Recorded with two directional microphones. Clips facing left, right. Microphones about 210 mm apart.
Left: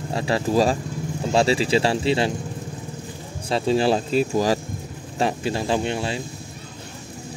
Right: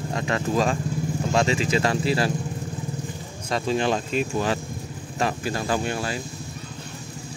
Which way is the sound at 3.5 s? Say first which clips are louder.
Left 4 dB; 30° left (ahead or behind).